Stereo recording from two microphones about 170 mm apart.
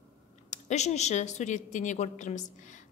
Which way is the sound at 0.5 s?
40° left (ahead or behind).